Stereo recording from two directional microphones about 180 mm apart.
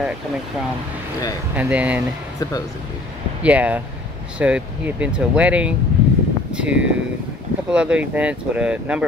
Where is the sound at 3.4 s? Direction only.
10° right (ahead or behind).